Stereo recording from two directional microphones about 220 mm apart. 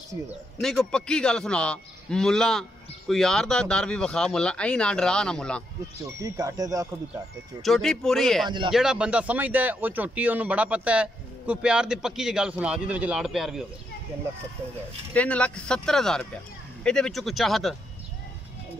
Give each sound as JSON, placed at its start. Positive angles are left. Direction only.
{"t": 0.6, "sound": "speech", "side_deg": 0}
{"t": 6.0, "sound": "speech", "side_deg": -15}
{"t": 7.6, "sound": "speech", "side_deg": 0}
{"t": 8.5, "sound": "speech", "side_deg": -20}
{"t": 8.7, "sound": "speech", "side_deg": -5}
{"t": 15.1, "sound": "speech", "side_deg": 5}